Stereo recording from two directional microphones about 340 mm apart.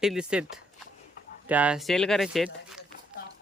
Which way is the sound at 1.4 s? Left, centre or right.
Centre.